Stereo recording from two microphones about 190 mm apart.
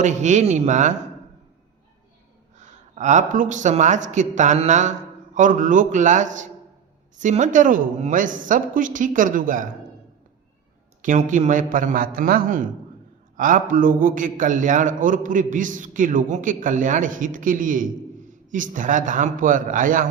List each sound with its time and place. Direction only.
0.0 s speech: 40° right (ahead or behind)
2.6 s a man's voice: 40° right (ahead or behind)
11.0 s a man's voice: 40° right (ahead or behind)